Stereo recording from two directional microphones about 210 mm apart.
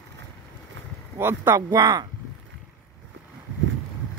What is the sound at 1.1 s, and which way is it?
Speech, 10° right (ahead or behind).